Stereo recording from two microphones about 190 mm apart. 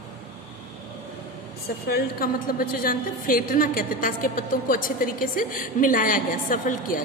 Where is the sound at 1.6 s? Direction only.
55° left (ahead or behind).